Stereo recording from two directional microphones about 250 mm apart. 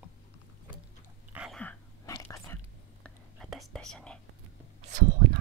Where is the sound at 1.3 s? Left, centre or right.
Centre.